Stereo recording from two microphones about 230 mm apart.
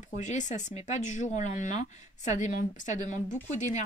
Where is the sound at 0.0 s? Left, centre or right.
Left.